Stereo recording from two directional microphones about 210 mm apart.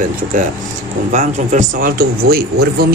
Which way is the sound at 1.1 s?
40° right (ahead or behind).